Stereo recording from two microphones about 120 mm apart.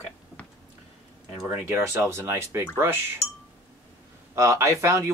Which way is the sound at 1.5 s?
20° right (ahead or behind).